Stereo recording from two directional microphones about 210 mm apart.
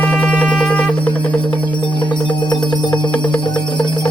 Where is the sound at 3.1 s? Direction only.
5° left (ahead or behind).